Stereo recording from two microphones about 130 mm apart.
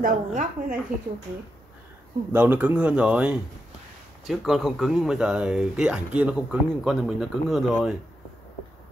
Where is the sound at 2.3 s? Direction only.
15° right (ahead or behind).